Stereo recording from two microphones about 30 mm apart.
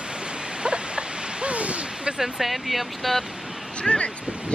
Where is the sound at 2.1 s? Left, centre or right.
Centre.